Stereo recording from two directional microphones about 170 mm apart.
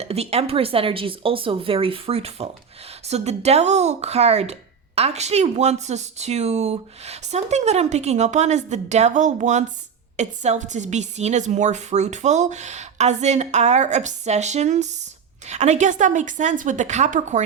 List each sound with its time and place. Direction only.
0.0 s a woman's voice: 40° right (ahead or behind)